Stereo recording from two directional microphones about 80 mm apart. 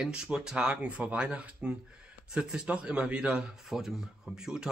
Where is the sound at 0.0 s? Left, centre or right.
Centre.